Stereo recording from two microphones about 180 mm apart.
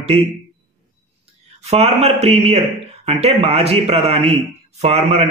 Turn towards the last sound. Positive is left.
turn(degrees=-35)  # may be behind; listen again after turning